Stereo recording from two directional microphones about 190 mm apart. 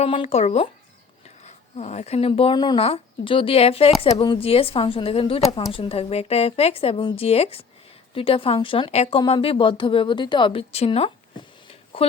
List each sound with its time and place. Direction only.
0.0 s a woman's voice: 30° left (ahead or behind)